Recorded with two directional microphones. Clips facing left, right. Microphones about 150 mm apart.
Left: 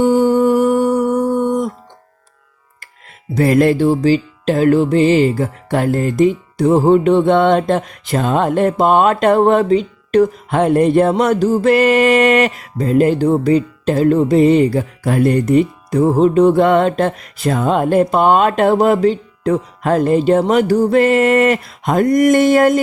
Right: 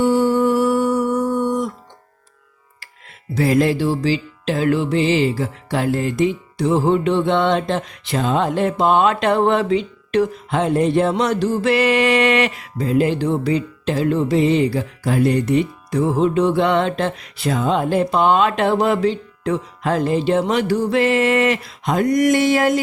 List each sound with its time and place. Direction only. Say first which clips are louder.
0.0 s music: left 4 dB; 45° left (ahead or behind)
3.3 s music: left 4 dB; 55° left (ahead or behind)